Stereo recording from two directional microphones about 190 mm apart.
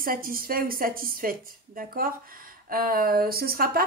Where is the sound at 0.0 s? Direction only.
50° right (ahead or behind).